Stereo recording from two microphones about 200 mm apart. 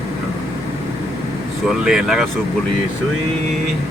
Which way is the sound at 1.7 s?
5° right (ahead or behind).